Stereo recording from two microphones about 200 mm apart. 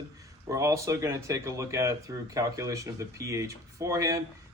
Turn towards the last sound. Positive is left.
turn(degrees=-15)  # may be behind; listen again after turning